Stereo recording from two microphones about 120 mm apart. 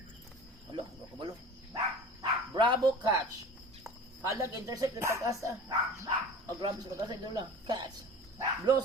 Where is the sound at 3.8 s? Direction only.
25° right (ahead or behind).